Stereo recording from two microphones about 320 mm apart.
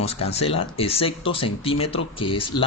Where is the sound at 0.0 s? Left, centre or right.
Centre.